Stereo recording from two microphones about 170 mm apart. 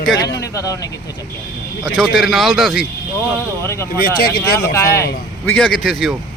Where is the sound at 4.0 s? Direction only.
65° left (ahead or behind).